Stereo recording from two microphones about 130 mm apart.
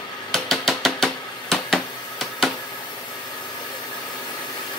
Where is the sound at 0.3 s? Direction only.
5° left (ahead or behind).